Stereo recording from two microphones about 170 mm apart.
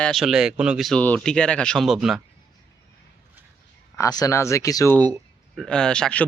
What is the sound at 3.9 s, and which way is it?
Speech, 20° left (ahead or behind).